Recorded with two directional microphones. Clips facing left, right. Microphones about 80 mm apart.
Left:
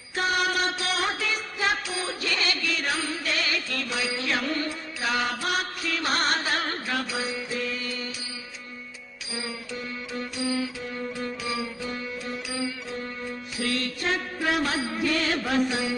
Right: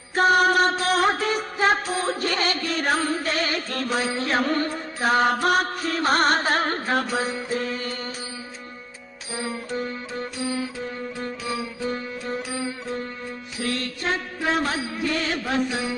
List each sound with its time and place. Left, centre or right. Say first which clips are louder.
0.1 s music: right 8 dB; right
9.3 s music: right 6 dB; right
12.3 s music: right 4 dB; right
13.6 s mantra: right 1 dB; right